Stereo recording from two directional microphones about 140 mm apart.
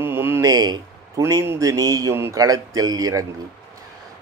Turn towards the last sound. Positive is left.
turn(degrees=-25)  # may be behind; listen again after turning